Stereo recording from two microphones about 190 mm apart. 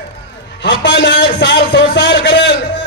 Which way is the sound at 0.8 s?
70° left (ahead or behind).